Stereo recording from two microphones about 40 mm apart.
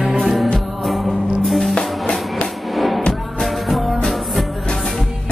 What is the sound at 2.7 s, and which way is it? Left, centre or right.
Music, centre.